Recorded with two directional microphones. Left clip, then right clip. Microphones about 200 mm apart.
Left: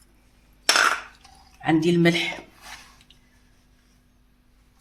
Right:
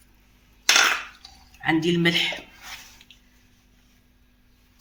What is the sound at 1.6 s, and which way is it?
Speech, 50° left (ahead or behind).